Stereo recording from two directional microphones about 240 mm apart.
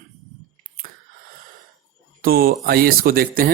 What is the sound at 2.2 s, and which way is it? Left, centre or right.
Speech, right.